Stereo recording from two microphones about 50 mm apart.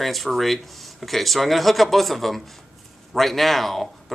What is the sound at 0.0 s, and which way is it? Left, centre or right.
A man's voice, centre.